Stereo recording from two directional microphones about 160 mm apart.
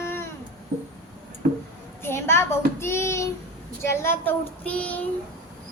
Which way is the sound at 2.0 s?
15° left (ahead or behind).